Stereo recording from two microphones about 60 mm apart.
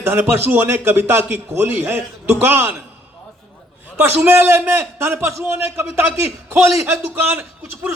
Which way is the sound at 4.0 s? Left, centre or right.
Right.